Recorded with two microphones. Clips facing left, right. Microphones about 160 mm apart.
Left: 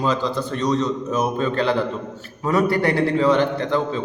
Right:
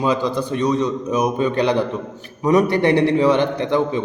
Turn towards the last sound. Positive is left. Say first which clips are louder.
# right 3 dB
turn(degrees=-15)  # may be behind; listen again after turning